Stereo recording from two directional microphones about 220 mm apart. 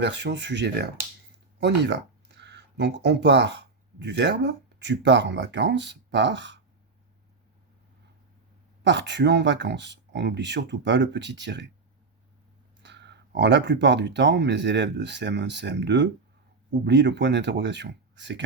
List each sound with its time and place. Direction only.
0.0 s speech: 50° right (ahead or behind)
8.8 s speech: 55° right (ahead or behind)
12.8 s speech: 55° right (ahead or behind)